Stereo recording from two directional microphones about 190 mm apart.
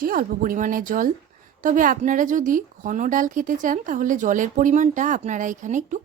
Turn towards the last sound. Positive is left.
turn(degrees=-40)  # may be behind; listen again after turning